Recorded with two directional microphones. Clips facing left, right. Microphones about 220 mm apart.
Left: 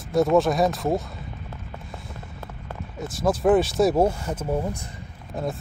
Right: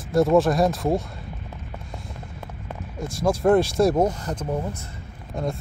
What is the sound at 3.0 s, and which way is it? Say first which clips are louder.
Speech: right 1 dB; centre (ahead or behind).